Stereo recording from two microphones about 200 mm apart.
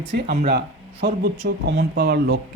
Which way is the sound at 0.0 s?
55° right (ahead or behind).